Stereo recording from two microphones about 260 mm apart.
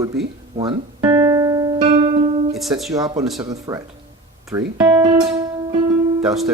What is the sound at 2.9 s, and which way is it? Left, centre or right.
Speech, centre.